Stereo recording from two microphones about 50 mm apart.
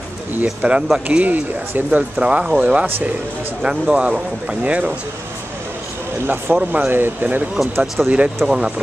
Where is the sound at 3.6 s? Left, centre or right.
Right.